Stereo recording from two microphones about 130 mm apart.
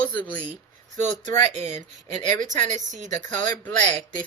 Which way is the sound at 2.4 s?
70° right (ahead or behind).